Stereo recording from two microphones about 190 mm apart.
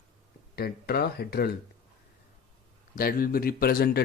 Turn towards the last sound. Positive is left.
turn(degrees=55)  # may be behind; listen again after turning